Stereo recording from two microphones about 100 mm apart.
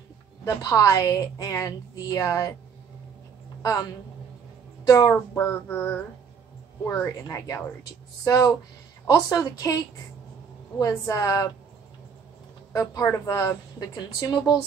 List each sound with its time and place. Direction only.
0.5 s a woman's voice: 35° left (ahead or behind)
4.8 s a woman's voice: 35° left (ahead or behind)
12.7 s a woman's voice: 30° left (ahead or behind)